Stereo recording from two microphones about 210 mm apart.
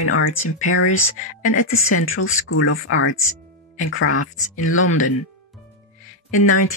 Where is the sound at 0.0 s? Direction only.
85° left.